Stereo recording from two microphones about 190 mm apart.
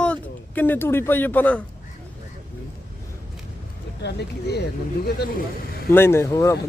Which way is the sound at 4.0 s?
60° left (ahead or behind).